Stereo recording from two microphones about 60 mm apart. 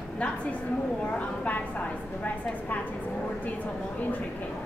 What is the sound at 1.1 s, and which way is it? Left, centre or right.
Speech, left.